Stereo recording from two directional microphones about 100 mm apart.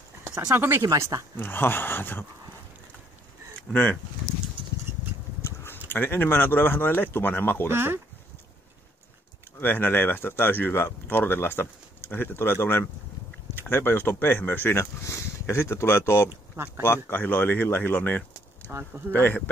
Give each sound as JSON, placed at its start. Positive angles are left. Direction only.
{"t": 0.2, "sound": "speech", "side_deg": -25}
{"t": 1.3, "sound": "speech", "side_deg": 20}
{"t": 3.7, "sound": "speech", "side_deg": 15}
{"t": 5.4, "sound": "a sound", "side_deg": 25}
{"t": 5.9, "sound": "speech", "side_deg": 20}
{"t": 7.6, "sound": "speech", "side_deg": -25}
{"t": 9.6, "sound": "speech", "side_deg": 20}
{"t": 16.5, "sound": "speech", "side_deg": -25}
{"t": 16.8, "sound": "speech", "side_deg": 20}
{"t": 18.7, "sound": "speech", "side_deg": -25}
{"t": 19.1, "sound": "speech", "side_deg": 20}